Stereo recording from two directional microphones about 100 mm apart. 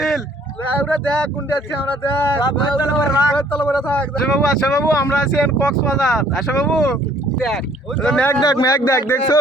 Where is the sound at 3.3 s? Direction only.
15° left (ahead or behind).